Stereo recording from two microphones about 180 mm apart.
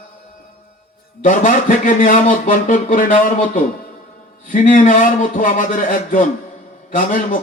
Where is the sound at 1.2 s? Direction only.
45° left (ahead or behind).